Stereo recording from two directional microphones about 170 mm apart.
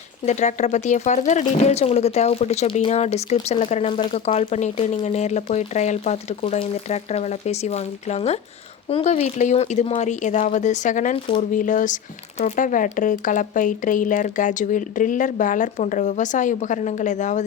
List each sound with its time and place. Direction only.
0.3 s speech: 45° left (ahead or behind)